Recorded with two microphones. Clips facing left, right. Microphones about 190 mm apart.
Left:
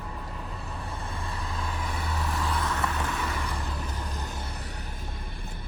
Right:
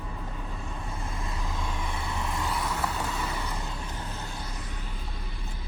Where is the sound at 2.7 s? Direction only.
20° right (ahead or behind).